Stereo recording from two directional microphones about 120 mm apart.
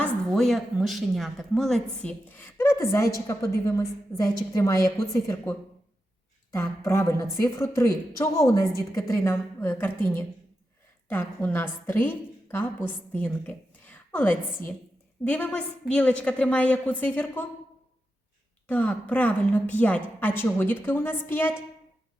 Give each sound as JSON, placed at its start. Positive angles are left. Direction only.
{"t": 0.3, "sound": "a woman's voice", "side_deg": 0}
{"t": 18.7, "sound": "a woman's voice", "side_deg": 15}